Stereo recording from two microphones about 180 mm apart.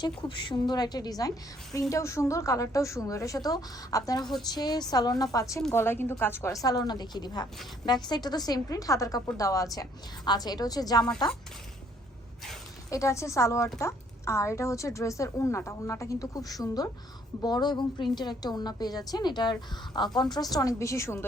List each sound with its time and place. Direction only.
0.0 s a woman's voice: 25° left (ahead or behind)
12.9 s a woman's voice: 15° left (ahead or behind)